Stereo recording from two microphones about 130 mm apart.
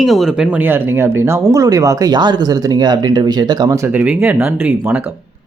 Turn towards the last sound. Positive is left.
turn(degrees=-15)  # may be behind; listen again after turning